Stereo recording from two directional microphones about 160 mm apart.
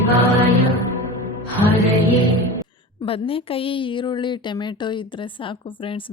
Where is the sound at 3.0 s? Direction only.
35° left (ahead or behind).